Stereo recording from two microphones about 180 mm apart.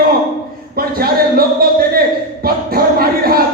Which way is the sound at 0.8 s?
55° right (ahead or behind).